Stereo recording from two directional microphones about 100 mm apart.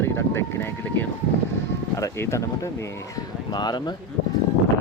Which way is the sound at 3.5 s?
45° left (ahead or behind).